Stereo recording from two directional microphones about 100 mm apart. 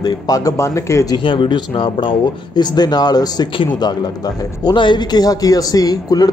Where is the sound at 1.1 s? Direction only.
55° left (ahead or behind).